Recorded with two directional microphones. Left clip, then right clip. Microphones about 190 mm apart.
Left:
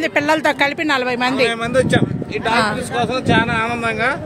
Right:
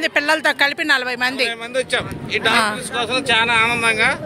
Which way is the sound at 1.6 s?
60° left (ahead or behind).